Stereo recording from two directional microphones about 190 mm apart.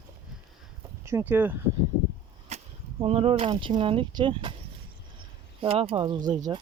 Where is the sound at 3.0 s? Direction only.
30° right (ahead or behind).